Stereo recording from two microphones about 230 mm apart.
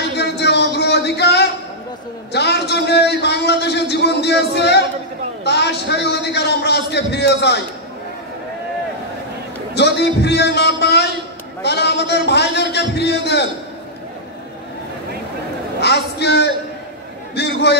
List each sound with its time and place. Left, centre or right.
0.2 s a sound: left
5.4 s a man's voice: left
9.8 s a man's voice: left
15.8 s a man's voice: left